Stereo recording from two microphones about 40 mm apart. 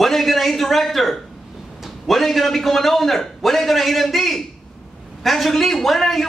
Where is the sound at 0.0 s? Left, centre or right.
Centre.